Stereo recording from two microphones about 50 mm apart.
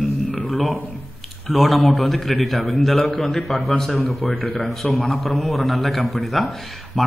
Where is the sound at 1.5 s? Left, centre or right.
Centre.